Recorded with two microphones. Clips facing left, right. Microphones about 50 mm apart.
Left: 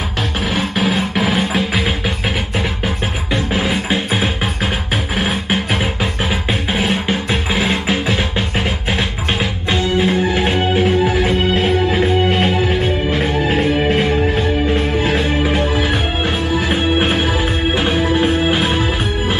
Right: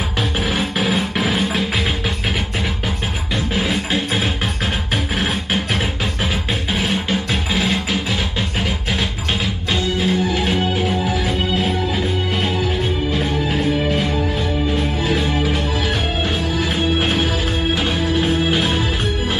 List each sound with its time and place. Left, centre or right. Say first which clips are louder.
0.6 s music: left 4 dB; centre
3.6 s music: left 2 dB; centre
6.7 s music: left 2 dB; left